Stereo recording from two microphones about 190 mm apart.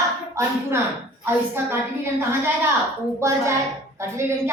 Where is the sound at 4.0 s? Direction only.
15° right (ahead or behind).